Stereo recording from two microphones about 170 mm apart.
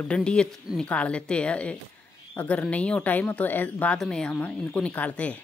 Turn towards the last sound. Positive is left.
turn(degrees=10)  # may be behind; listen again after turning